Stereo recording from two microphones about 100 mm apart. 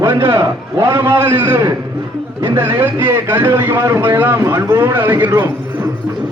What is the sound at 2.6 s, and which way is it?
Speech, 20° right (ahead or behind).